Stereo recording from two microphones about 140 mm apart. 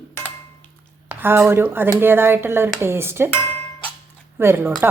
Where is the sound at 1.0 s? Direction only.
15° right (ahead or behind).